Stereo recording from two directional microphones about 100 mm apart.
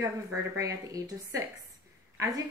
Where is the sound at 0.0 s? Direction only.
30° right (ahead or behind).